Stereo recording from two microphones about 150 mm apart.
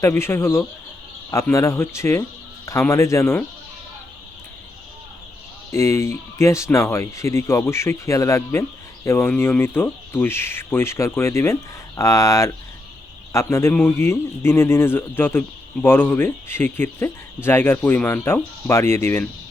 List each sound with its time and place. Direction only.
0.0 s a man's voice: 15° left (ahead or behind)
5.7 s a man's voice: 15° left (ahead or behind)